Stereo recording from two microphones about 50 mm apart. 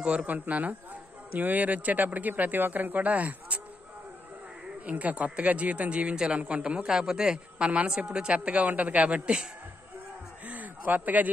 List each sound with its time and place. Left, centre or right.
0.0 s speech: right
4.8 s a man's voice: right
10.4 s a sound: right